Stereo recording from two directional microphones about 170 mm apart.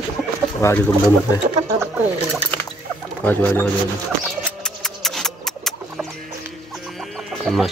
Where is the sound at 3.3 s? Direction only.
10° left (ahead or behind).